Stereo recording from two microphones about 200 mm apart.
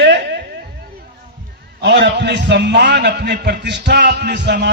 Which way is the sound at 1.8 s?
60° right (ahead or behind).